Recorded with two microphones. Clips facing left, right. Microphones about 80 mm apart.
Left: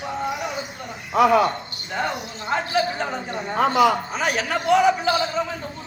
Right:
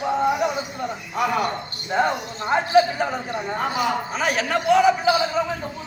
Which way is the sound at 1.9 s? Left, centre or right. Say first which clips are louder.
Right 5 dB; right.